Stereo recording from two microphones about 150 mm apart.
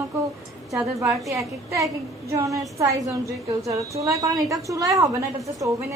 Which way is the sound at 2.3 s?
20° right (ahead or behind).